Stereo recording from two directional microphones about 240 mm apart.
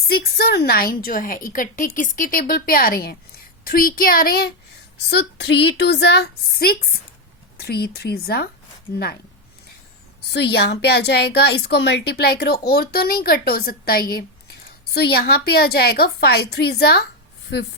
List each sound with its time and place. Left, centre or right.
0.1 s a woman's voice: left
10.3 s a woman's voice: left
14.1 s a sound: left
14.9 s a woman's voice: left